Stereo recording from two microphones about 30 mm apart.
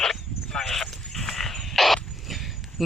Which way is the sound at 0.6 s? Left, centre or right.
Centre.